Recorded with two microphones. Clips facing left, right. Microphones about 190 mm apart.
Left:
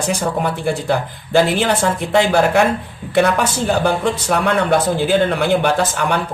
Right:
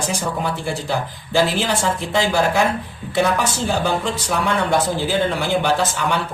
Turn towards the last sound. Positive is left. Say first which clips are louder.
# left 2 dB
turn(degrees=55)  # may be behind; listen again after turning